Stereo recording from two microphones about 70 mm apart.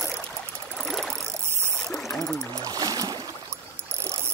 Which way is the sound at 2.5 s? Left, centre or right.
Right.